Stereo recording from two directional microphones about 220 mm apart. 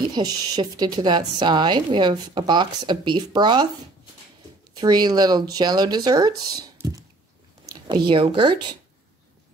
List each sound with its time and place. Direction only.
0.1 s a woman's voice: 20° right (ahead or behind)
4.7 s a woman's voice: 20° right (ahead or behind)
8.1 s a woman's voice: 25° right (ahead or behind)